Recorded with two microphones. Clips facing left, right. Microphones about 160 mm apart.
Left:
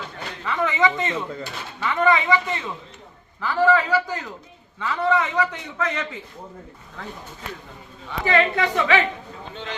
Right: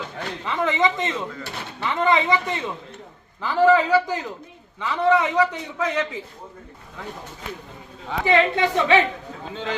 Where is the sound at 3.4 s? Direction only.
20° right (ahead or behind).